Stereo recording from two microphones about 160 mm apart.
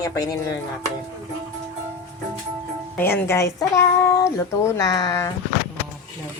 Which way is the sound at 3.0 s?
15° left (ahead or behind).